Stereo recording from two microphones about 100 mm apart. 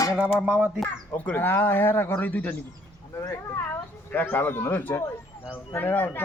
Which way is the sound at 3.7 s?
20° left (ahead or behind).